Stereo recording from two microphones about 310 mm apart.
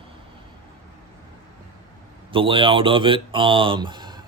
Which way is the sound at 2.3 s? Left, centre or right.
Centre.